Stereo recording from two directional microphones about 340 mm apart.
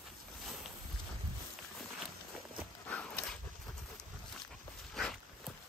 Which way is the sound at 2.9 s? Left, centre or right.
Centre.